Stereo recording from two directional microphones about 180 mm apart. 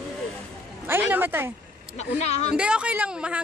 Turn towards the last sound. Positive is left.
turn(degrees=-5)  # may be behind; listen again after turning